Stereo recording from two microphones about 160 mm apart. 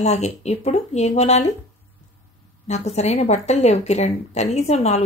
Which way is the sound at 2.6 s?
45° left (ahead or behind).